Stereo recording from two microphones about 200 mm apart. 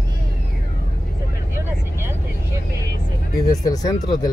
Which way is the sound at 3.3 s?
20° left (ahead or behind).